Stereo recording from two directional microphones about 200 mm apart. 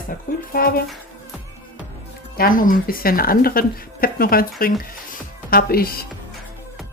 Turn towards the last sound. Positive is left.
turn(degrees=50)  # may be behind; listen again after turning